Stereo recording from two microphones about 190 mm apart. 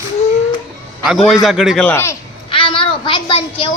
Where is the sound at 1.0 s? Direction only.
Centre (ahead or behind).